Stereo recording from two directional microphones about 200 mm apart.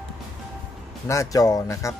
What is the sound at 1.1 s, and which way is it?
Speech, 15° left (ahead or behind).